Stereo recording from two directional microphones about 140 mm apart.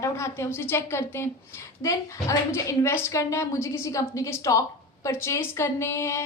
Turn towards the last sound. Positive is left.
turn(degrees=20)  # may be behind; listen again after turning